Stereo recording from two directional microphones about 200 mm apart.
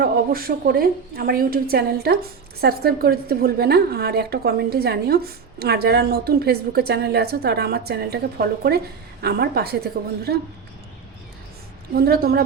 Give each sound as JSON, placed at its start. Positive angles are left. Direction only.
{"t": 0.0, "sound": "a woman's voice", "side_deg": -45}
{"t": 11.9, "sound": "a woman's voice", "side_deg": -50}